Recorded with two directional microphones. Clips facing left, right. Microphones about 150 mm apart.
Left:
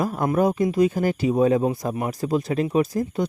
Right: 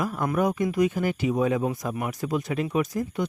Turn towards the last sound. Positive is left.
turn(degrees=35)  # may be behind; listen again after turning